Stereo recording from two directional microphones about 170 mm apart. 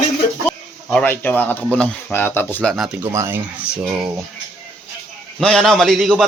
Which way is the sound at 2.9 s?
15° right (ahead or behind).